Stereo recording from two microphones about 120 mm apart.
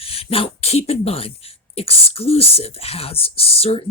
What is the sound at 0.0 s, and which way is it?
Speech, 55° left (ahead or behind).